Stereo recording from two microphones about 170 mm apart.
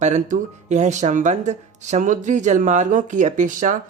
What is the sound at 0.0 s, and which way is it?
Speech, 45° right (ahead or behind).